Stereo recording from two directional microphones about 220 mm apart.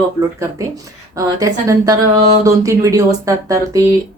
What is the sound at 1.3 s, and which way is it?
Speech, 15° right (ahead or behind).